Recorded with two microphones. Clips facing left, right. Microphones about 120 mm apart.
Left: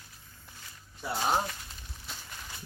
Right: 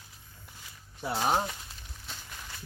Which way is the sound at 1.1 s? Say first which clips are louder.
Right 1 dB; 10° right (ahead or behind).